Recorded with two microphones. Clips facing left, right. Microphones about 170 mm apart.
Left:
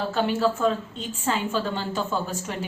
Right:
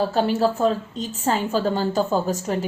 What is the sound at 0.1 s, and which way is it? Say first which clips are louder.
A woman's voice: right 3 dB; 35° right (ahead or behind).